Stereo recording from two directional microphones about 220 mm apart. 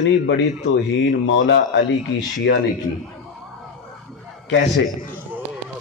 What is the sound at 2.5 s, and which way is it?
Speech, 55° left (ahead or behind).